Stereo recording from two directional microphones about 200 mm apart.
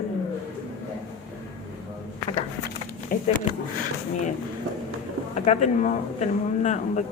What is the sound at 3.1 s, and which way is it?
Speech, 45° left (ahead or behind).